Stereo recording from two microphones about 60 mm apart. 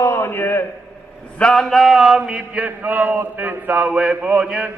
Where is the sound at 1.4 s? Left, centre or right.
Centre; by 3.9 s right.